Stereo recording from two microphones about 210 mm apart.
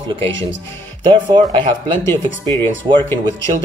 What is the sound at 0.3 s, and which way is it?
Speech, 60° right (ahead or behind).